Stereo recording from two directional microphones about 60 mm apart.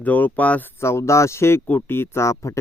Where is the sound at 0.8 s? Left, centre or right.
Left.